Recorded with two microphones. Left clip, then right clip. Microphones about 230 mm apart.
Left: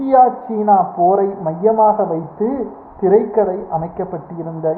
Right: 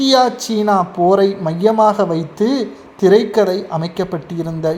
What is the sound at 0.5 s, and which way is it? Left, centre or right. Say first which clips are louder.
Speech: left 2 dB; right.